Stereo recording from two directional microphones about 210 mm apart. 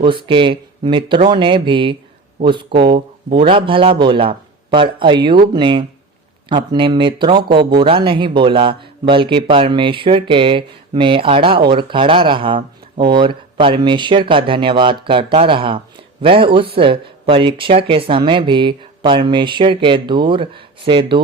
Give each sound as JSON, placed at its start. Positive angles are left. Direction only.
{"t": 0.0, "sound": "speech", "side_deg": -25}